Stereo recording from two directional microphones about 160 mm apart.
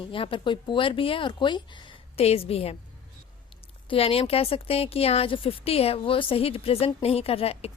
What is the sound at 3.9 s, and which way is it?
A woman's voice, 35° left (ahead or behind).